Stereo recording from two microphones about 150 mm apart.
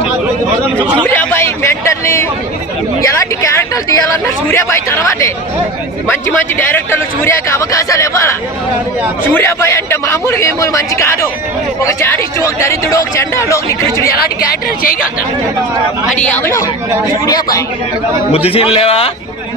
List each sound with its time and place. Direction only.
1.0 s a man's voice: 15° left (ahead or behind)
14.1 s speech: 90° left; by 15.0 s 75° left (ahead or behind)
16.2 s speech: 10° left (ahead or behind)
17.3 s a man's voice: 25° left (ahead or behind)
18.3 s a man's voice: 40° left (ahead or behind)